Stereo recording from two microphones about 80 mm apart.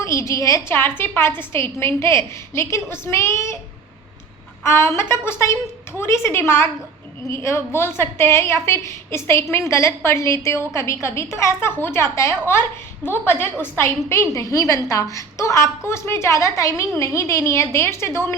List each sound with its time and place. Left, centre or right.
0.0 s a woman's voice: left
0.7 s a woman's voice: left
4.6 s a woman's voice: left